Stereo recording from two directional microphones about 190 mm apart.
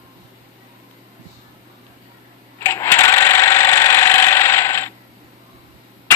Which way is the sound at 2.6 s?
15° left (ahead or behind).